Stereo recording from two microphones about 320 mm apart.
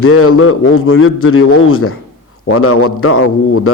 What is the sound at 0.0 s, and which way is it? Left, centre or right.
Speech, left.